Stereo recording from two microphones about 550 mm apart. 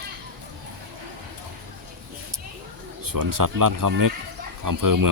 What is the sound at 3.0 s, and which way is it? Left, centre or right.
Speech, right.